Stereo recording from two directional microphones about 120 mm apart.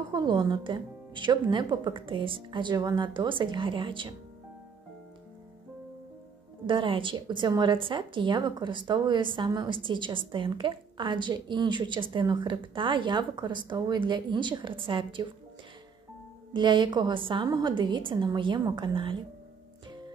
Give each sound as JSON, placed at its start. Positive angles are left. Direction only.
{"t": 0.1, "sound": "a woman's voice", "side_deg": -35}
{"t": 6.6, "sound": "a woman's voice", "side_deg": -45}
{"t": 16.5, "sound": "a woman's voice", "side_deg": -40}